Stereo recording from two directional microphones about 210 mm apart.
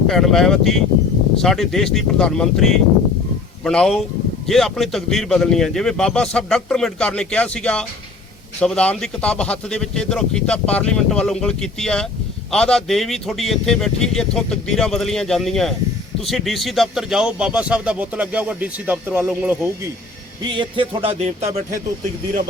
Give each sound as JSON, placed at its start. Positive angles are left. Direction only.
{"t": 0.1, "sound": "a man's voice", "side_deg": 0}
{"t": 20.4, "sound": "music", "side_deg": -20}